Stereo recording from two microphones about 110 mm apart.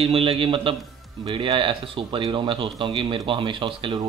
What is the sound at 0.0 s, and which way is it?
A man's voice, 60° right (ahead or behind).